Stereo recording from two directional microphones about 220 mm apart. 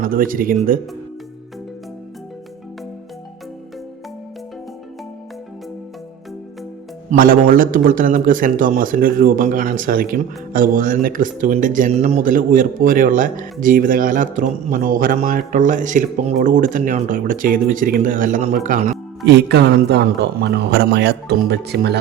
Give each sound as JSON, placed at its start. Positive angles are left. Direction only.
{"t": 0.0, "sound": "a man's voice", "side_deg": -40}
{"t": 7.1, "sound": "a man's voice", "side_deg": -40}
{"t": 19.2, "sound": "speech", "side_deg": -50}